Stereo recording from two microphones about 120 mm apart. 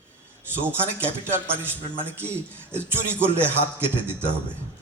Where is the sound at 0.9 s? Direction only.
20° right (ahead or behind).